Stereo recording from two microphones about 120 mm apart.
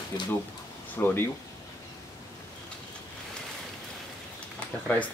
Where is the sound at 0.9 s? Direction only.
15° left (ahead or behind).